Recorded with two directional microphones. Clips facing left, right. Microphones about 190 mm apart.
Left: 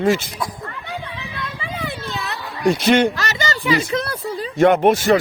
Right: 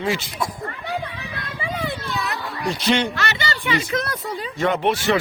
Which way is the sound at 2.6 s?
50° left (ahead or behind).